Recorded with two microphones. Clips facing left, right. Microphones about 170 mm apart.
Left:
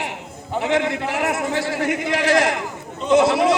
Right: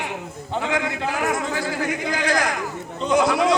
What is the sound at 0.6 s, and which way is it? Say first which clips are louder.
A man's voice: left 5 dB; 25° left (ahead or behind).